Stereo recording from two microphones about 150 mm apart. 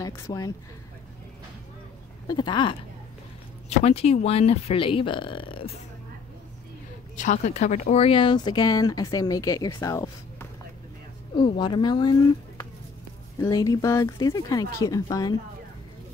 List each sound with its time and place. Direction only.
0.0 s speech: 25° left (ahead or behind)
2.2 s speech: 30° left (ahead or behind)
3.6 s speech: 45° left (ahead or behind)
7.2 s speech: 50° left (ahead or behind); by 12.2 s 30° left (ahead or behind)
13.4 s speech: 25° left (ahead or behind)